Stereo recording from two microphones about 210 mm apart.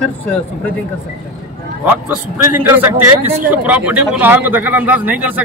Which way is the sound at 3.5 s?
5° right (ahead or behind).